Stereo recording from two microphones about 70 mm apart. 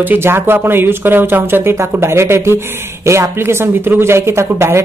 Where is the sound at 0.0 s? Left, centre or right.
Right.